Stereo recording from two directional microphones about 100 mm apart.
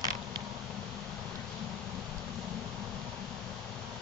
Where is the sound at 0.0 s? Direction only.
40° right (ahead or behind).